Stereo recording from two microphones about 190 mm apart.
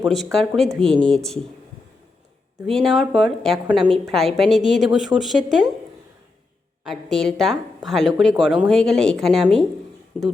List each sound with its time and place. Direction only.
0.0 s a woman's voice: centre (ahead or behind)
2.6 s a woman's voice: centre (ahead or behind)
6.8 s a woman's voice: centre (ahead or behind)